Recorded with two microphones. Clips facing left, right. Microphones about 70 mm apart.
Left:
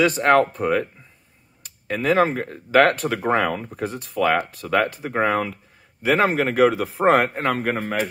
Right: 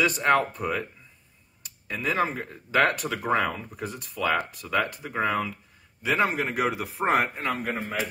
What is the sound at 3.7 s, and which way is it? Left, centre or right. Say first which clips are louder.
Speech: left 7 dB; left.